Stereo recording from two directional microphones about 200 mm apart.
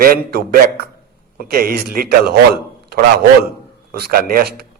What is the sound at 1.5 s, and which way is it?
A man's voice, 50° right (ahead or behind).